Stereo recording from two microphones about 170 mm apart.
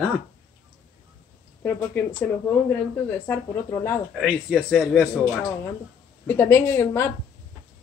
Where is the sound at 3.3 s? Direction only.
15° left (ahead or behind).